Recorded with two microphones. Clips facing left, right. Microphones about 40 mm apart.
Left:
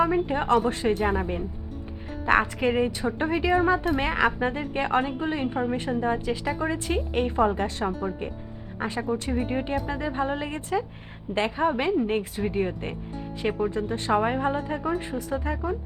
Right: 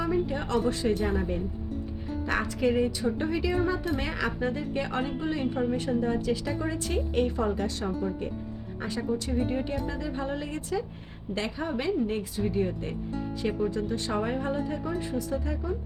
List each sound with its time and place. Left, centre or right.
0.0 s a woman's voice: left
9.0 s a woman's voice: left